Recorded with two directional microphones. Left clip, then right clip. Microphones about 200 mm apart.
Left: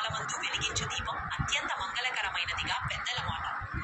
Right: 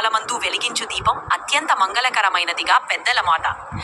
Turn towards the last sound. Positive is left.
turn(degrees=-50)  # may be behind; listen again after turning